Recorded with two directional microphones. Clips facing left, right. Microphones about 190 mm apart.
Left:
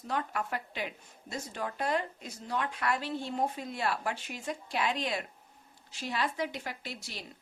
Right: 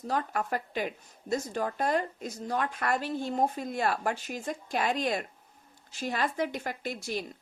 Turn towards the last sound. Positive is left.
turn(degrees=-50)  # may be behind; listen again after turning